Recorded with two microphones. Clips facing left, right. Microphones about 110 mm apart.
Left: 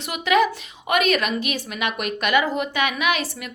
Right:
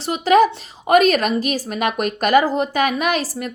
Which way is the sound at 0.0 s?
35° right (ahead or behind).